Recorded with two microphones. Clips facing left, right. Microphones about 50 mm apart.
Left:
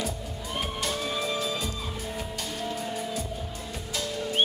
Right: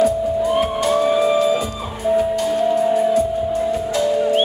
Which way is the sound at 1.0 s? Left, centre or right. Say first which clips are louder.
Right 16 dB; centre.